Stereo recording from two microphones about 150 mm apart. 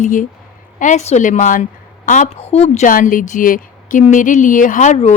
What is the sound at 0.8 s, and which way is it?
A woman's voice, 50° left (ahead or behind).